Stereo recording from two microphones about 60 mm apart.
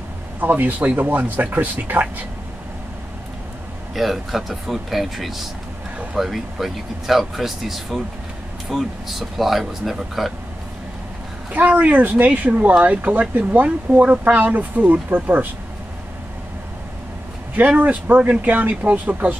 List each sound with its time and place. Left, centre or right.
0.4 s speech: right
3.9 s speech: centre
11.5 s speech: right
17.6 s speech: right